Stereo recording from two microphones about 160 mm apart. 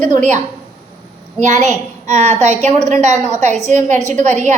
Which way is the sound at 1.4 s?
45° right (ahead or behind).